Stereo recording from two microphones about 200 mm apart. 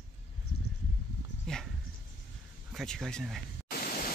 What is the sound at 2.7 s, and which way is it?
Speech, centre (ahead or behind).